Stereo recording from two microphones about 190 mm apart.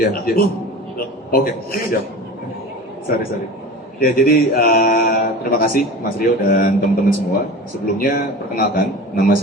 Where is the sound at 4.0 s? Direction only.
50° left (ahead or behind).